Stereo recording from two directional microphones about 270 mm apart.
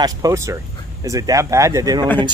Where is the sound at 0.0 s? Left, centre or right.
Centre.